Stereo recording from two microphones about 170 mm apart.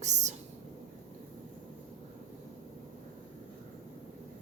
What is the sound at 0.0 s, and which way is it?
Whispering, 45° right (ahead or behind).